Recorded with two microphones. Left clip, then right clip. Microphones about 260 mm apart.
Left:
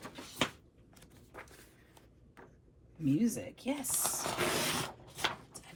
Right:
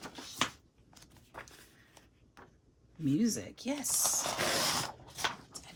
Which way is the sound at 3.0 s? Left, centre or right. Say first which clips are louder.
Even; right.